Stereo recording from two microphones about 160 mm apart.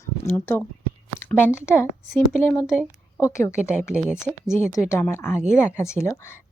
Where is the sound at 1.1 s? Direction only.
15° left (ahead or behind).